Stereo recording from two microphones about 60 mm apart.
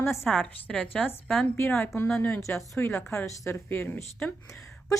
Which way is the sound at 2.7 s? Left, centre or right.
Left.